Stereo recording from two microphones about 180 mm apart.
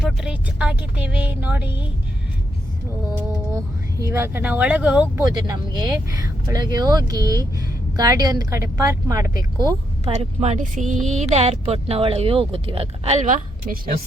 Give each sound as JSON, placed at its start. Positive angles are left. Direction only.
{"t": 0.0, "sound": "speech", "side_deg": -5}
{"t": 3.5, "sound": "speech", "side_deg": -15}
{"t": 5.5, "sound": "speech", "side_deg": -20}
{"t": 10.1, "sound": "speech", "side_deg": -40}